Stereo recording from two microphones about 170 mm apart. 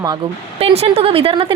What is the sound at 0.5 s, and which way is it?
Speech, 35° right (ahead or behind).